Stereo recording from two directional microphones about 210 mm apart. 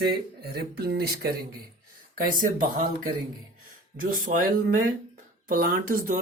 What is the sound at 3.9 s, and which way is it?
Speech, 40° right (ahead or behind).